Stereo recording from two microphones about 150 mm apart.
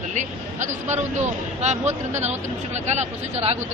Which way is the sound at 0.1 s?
55° right (ahead or behind).